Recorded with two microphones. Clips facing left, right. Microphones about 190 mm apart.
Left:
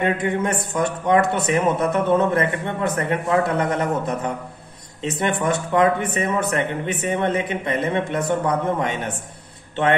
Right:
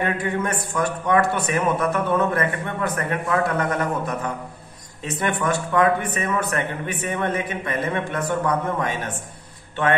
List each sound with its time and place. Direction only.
0.0 s a man's voice: 20° left (ahead or behind)
5.4 s a man's voice: 20° left (ahead or behind)